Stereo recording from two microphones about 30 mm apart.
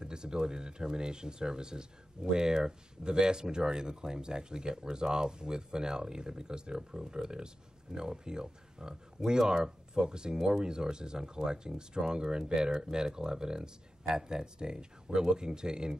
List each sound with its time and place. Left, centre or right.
0.0 s speech: right
9.9 s speech: right